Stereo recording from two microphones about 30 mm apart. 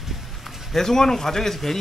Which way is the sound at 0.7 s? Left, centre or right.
Centre.